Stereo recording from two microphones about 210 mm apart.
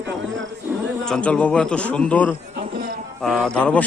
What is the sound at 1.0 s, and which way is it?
A man's voice, 5° left (ahead or behind).